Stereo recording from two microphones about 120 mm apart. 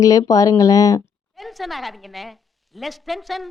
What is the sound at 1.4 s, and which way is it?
A woman's voice, centre (ahead or behind).